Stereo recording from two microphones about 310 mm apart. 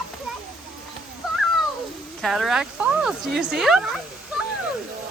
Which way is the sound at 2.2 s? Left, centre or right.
Centre.